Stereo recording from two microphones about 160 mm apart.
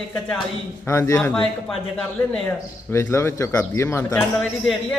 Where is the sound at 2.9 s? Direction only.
15° left (ahead or behind).